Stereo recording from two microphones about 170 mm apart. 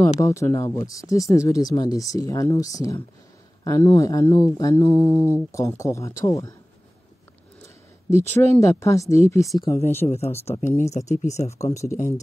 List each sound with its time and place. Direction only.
0.0 s speech: 15° left (ahead or behind)
7.6 s a sound: 15° left (ahead or behind)
8.5 s speech: 20° left (ahead or behind)
10.0 s speech: 40° left (ahead or behind)
11.6 s speech: 15° left (ahead or behind)